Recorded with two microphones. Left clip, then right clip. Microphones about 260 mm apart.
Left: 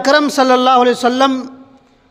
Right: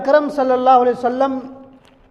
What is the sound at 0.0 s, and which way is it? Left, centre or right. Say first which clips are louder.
A man's voice: left 3 dB; left.